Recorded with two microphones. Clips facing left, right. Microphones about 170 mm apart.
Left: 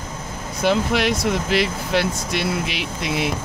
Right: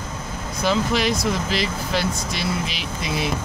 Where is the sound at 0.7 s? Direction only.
60° left (ahead or behind).